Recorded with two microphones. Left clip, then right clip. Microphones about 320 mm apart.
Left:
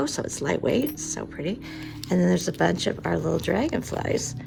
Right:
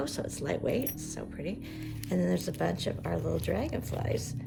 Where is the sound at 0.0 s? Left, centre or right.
Left.